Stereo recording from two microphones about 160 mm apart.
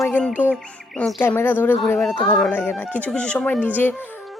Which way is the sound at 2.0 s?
Centre (ahead or behind).